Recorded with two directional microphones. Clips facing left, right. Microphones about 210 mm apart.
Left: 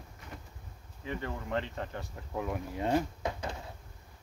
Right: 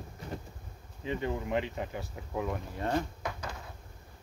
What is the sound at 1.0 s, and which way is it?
Speech, 15° right (ahead or behind).